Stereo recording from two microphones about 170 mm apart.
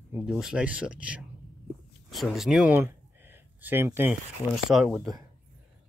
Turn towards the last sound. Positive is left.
turn(degrees=0)  # may be behind; listen again after turning